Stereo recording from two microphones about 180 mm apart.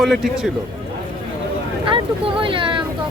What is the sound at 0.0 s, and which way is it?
Speech, centre (ahead or behind).